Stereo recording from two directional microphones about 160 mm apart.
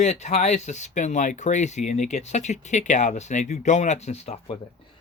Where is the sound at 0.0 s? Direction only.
45° left (ahead or behind).